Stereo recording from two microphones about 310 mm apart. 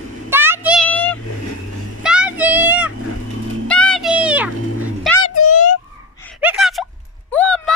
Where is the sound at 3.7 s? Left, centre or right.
Centre.